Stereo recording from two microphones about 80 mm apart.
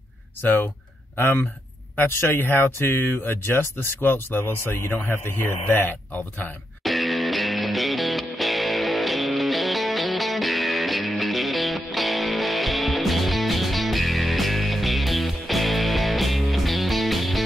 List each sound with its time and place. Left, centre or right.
0.4 s speech: left
6.8 s music: centre